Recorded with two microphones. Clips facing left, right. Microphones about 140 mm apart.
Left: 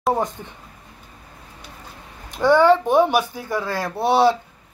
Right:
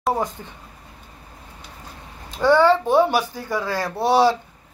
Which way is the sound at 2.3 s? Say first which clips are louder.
Left 1 dB; 15° left (ahead or behind).